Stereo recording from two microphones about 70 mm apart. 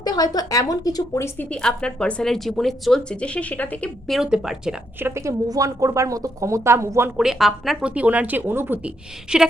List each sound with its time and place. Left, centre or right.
0.0 s a woman's voice: left
1.5 s a woman's voice: centre
3.1 s speech: centre
4.2 s a woman's voice: centre
4.9 s a woman's voice: right
5.2 s speech: right
7.2 s speech: centre
7.9 s speech: centre
9.3 s a woman's voice: centre